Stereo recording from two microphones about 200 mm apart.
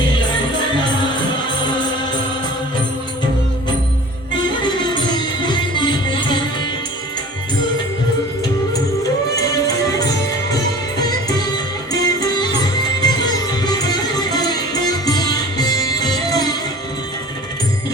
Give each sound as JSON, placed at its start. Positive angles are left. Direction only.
{"t": 4.6, "sound": "music", "side_deg": 20}
{"t": 11.3, "sound": "music", "side_deg": 20}